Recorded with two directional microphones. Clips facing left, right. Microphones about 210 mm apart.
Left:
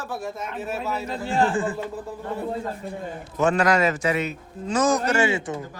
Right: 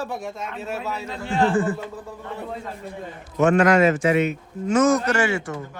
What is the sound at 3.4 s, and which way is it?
A man's voice, 35° left (ahead or behind).